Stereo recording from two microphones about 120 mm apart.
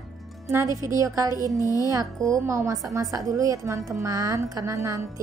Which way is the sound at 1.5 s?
30° left (ahead or behind).